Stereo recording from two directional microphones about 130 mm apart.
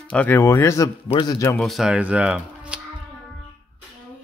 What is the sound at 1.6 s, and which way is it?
Speech, centre (ahead or behind).